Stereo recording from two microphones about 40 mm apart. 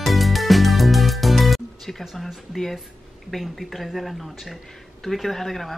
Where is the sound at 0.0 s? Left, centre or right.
Centre.